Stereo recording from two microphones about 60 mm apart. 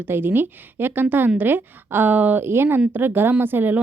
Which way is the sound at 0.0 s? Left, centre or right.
Right.